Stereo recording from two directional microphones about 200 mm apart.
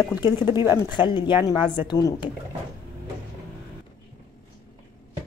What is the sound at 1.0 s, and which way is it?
Speech, 25° left (ahead or behind).